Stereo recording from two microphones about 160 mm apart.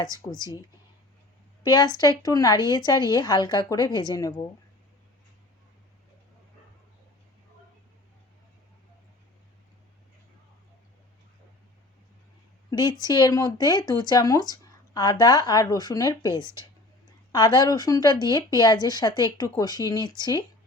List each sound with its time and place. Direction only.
0.0 s speech: 25° left (ahead or behind)
1.6 s speech: 25° left (ahead or behind)
12.7 s speech: 25° left (ahead or behind)